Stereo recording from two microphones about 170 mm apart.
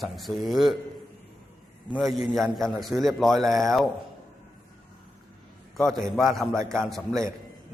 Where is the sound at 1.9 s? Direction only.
Centre (ahead or behind).